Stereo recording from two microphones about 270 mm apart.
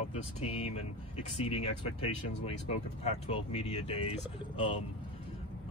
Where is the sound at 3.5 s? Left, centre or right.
Left.